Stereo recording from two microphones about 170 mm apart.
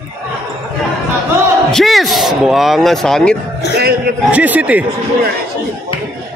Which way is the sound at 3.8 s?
65° right (ahead or behind).